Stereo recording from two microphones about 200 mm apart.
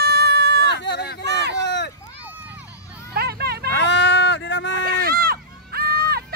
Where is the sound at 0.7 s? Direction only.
55° left (ahead or behind).